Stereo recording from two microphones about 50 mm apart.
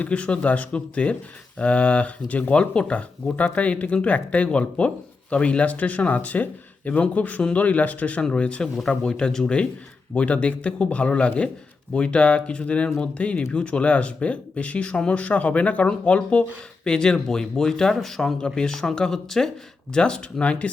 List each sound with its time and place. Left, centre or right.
0.0 s speech: left; by 18.3 s centre
18.3 s speech: centre